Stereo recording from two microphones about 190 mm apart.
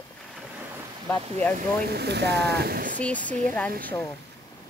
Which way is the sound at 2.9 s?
10° left (ahead or behind).